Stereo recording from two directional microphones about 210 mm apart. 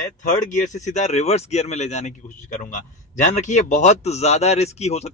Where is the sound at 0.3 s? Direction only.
35° left (ahead or behind).